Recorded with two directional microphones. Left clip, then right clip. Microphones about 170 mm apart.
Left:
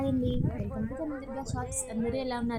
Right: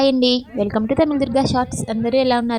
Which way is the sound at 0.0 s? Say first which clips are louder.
Right 15 dB; 50° right (ahead or behind).